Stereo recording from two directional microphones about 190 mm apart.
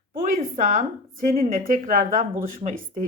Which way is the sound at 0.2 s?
45° right (ahead or behind).